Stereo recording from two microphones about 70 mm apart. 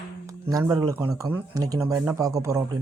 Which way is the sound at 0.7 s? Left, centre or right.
Right.